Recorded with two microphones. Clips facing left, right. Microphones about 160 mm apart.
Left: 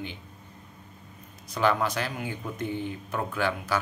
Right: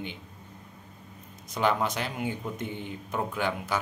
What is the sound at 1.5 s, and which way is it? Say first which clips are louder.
Speech: left 1 dB; 20° right (ahead or behind).